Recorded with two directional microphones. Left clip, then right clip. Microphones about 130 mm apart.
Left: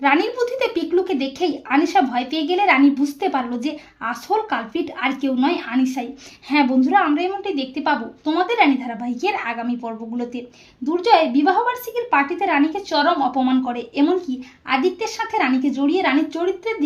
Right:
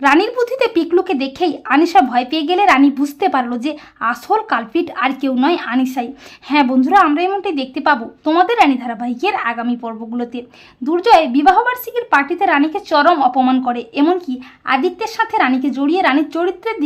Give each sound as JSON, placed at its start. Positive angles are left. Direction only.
{"t": 0.0, "sound": "speech", "side_deg": -35}
{"t": 0.3, "sound": "speech", "side_deg": -50}
{"t": 2.9, "sound": "a woman's voice", "side_deg": -50}
{"t": 14.0, "sound": "a woman's voice", "side_deg": -50}